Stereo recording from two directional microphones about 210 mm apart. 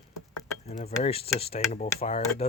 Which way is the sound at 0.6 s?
30° left (ahead or behind).